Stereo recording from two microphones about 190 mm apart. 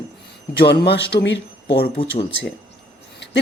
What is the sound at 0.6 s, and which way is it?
Speech, 60° left (ahead or behind).